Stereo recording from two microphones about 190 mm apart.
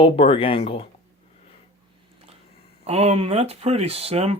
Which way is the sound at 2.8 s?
35° right (ahead or behind).